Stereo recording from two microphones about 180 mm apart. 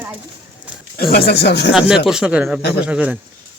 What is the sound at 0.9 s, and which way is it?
Speech, 60° left (ahead or behind).